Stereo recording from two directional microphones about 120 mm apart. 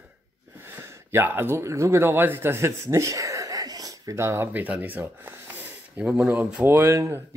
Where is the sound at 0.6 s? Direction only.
20° right (ahead or behind).